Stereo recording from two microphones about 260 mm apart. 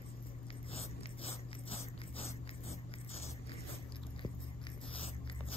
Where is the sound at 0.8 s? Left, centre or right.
Left.